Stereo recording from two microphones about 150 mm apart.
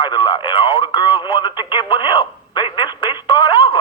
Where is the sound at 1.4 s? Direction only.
35° left (ahead or behind).